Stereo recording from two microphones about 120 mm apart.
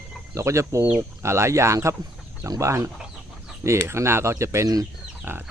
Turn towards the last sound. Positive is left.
turn(degrees=-15)  # may be behind; listen again after turning